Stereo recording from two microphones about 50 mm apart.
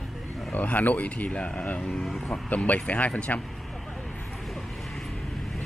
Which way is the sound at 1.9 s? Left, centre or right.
Centre.